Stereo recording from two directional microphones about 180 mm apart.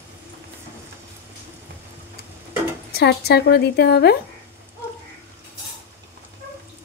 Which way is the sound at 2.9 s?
65° left (ahead or behind).